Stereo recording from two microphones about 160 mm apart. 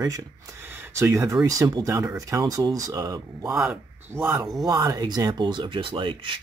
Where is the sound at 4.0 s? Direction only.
15° right (ahead or behind).